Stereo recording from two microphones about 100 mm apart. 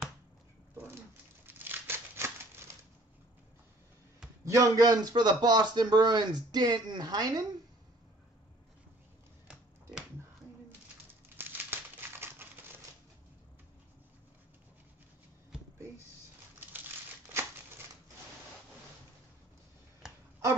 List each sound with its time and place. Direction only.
0.7 s crumpling: 25° right (ahead or behind)
4.5 s a man's voice: 35° right (ahead or behind)
11.2 s crumpling: 20° right (ahead or behind)